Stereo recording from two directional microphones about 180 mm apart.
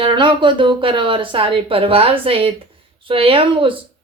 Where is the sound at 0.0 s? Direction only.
25° right (ahead or behind).